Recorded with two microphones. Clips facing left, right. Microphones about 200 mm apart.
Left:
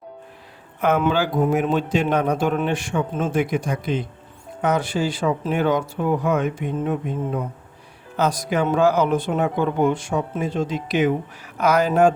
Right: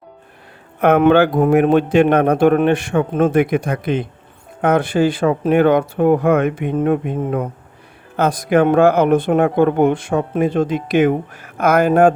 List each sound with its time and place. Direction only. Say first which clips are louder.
0.8 s speech: right 8 dB; 60° right (ahead or behind)